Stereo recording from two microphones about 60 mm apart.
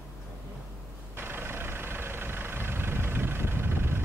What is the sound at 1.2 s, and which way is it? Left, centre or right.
Vehicle, right.